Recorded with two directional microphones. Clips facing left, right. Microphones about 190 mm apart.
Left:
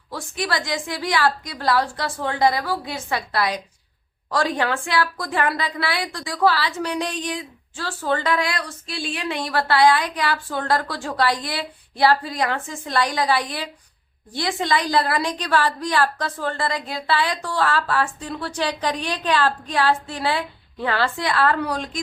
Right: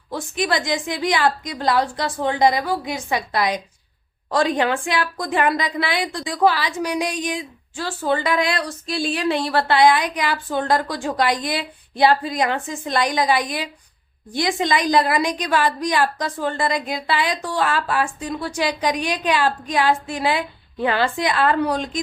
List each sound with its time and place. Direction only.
0.1 s a woman's voice: 20° right (ahead or behind)
8.6 s a woman's voice: 40° right (ahead or behind); by 21.8 s 20° right (ahead or behind)